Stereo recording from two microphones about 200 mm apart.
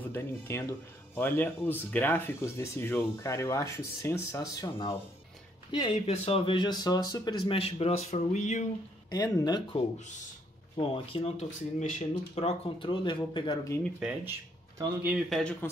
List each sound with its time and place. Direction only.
0.1 s speech: 10° left (ahead or behind); by 8.6 s 35° left (ahead or behind)
9.1 s speech: 20° left (ahead or behind)
10.8 s speech: 25° left (ahead or behind)
13.9 s speech: 10° right (ahead or behind)